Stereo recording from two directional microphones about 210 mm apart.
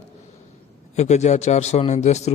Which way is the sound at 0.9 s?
35° left (ahead or behind).